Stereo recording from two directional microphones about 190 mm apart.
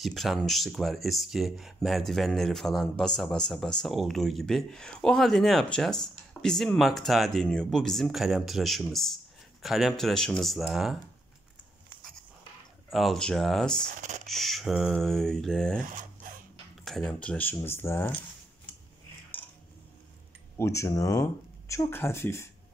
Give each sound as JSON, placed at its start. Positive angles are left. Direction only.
{"t": 0.0, "sound": "speech", "side_deg": 0}
{"t": 12.9, "sound": "speech", "side_deg": 0}
{"t": 13.8, "sound": "speech", "side_deg": -40}
{"t": 14.2, "sound": "speech", "side_deg": 0}
{"t": 16.8, "sound": "speech", "side_deg": 5}
{"t": 20.5, "sound": "speech", "side_deg": 15}